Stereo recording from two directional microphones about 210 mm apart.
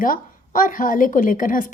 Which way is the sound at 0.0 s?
40° left (ahead or behind).